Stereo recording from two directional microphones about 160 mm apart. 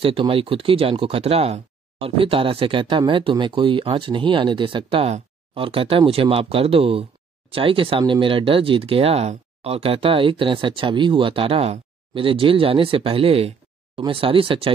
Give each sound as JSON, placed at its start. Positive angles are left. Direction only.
{"t": 0.0, "sound": "speech", "side_deg": -35}